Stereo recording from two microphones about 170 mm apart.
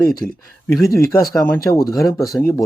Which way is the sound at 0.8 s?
15° left (ahead or behind).